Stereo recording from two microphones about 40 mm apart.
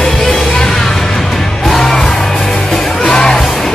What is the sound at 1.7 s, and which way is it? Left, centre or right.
Music, centre.